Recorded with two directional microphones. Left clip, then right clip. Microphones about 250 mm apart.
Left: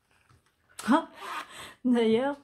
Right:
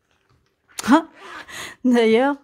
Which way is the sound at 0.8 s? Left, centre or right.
Right.